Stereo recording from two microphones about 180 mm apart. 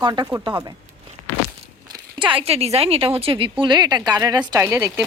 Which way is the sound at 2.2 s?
30° right (ahead or behind).